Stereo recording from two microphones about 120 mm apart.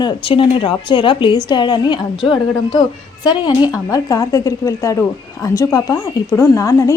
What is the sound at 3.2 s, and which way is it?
A woman's voice, 35° left (ahead or behind).